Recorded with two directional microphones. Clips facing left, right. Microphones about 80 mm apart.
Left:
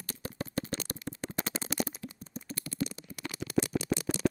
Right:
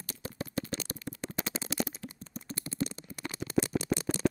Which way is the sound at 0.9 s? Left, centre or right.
Left.